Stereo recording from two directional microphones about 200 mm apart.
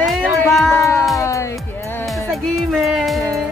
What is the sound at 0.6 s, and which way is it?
Speech, 15° left (ahead or behind).